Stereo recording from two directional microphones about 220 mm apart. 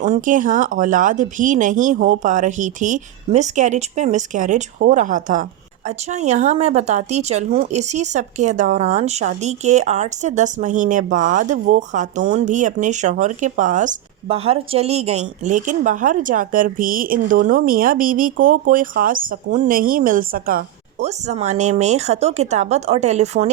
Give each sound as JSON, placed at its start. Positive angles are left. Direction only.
{"t": 0.0, "sound": "speech", "side_deg": -35}